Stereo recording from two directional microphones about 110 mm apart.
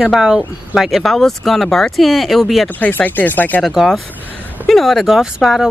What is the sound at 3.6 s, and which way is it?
Speech, centre (ahead or behind).